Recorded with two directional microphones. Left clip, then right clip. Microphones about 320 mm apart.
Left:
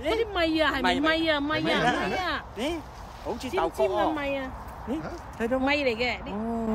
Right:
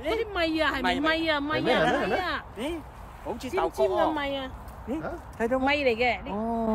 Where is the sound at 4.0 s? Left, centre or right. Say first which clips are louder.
Even; centre.